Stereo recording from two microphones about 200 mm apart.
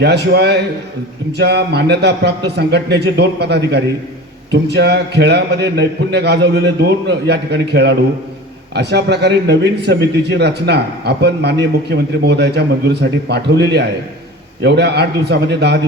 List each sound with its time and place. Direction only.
0.0 s speech: 55° right (ahead or behind)